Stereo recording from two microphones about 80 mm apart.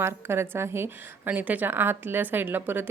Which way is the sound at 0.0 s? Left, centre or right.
Right.